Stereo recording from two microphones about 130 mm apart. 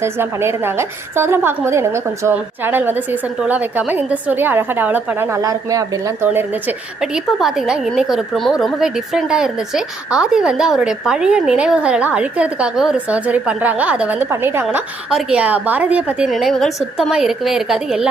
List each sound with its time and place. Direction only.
0.0 s a woman's voice: 20° right (ahead or behind)
6.2 s a woman's voice: 15° right (ahead or behind)